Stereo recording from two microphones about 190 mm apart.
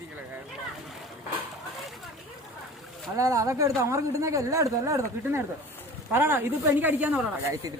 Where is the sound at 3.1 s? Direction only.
15° right (ahead or behind).